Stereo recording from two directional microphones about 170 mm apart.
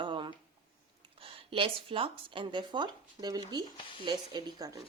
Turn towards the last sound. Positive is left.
turn(degrees=-25)  # may be behind; listen again after turning